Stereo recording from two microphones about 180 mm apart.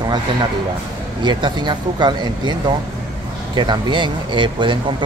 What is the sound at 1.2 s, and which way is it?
Speech, 25° right (ahead or behind).